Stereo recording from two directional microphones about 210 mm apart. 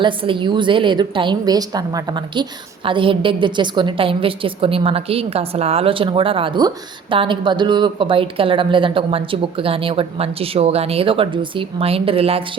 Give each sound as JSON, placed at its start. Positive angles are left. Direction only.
{"t": 0.0, "sound": "a woman's voice", "side_deg": -25}